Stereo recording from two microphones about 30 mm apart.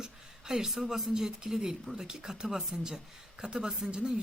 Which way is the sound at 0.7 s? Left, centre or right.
Centre.